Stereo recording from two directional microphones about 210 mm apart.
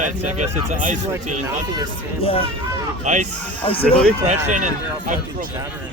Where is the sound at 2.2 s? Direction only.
25° left (ahead or behind).